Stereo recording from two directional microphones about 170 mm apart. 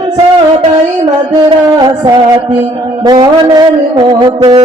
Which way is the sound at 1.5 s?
25° right (ahead or behind).